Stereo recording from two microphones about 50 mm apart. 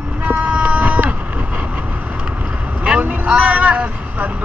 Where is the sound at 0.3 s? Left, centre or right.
Right.